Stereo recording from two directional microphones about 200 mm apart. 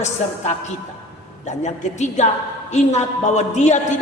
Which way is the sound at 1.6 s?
35° left (ahead or behind).